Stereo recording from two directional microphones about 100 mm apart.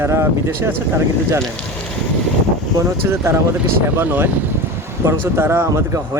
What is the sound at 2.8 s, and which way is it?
Speech, 25° right (ahead or behind).